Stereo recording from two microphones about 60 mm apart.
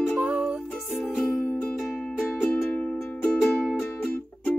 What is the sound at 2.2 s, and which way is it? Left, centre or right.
Music, left.